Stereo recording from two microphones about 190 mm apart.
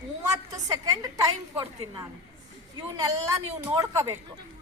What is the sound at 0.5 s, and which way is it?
A woman's voice, 20° right (ahead or behind).